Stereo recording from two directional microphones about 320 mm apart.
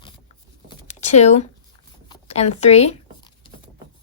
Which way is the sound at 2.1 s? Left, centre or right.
Centre.